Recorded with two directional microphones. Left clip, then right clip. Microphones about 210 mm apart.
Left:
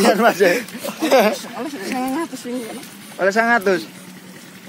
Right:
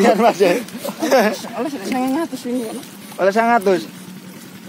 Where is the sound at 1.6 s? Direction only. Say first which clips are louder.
Right 3 dB; 35° right (ahead or behind).